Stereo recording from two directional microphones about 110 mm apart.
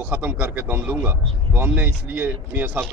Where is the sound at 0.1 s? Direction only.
15° right (ahead or behind).